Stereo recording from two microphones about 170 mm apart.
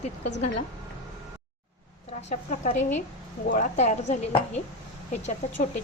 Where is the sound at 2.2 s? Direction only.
40° left (ahead or behind).